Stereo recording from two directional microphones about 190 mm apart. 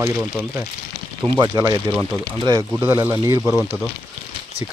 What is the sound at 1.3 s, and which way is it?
Speech, 20° right (ahead or behind).